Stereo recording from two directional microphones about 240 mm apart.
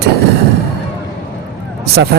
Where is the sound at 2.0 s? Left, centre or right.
Right.